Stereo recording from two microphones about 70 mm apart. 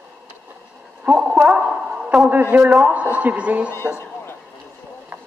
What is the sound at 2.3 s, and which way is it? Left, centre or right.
A man's voice, right.